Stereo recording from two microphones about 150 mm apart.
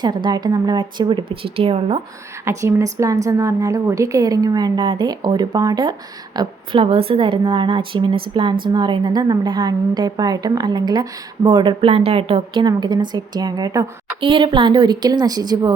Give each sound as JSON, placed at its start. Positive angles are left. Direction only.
{"t": 0.0, "sound": "a woman's voice", "side_deg": -30}
{"t": 2.4, "sound": "a woman's voice", "side_deg": -20}
{"t": 6.8, "sound": "a woman's voice", "side_deg": -40}
{"t": 14.2, "sound": "a woman's voice", "side_deg": -35}